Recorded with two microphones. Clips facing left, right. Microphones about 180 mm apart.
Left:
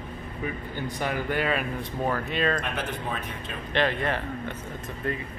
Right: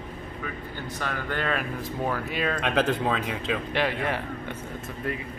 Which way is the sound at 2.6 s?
80° right.